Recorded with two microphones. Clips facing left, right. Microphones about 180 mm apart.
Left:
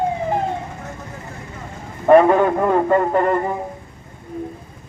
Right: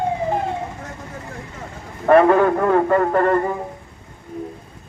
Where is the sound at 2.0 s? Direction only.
15° left (ahead or behind).